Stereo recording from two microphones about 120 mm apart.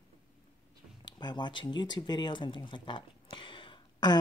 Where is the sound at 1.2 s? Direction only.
35° left (ahead or behind).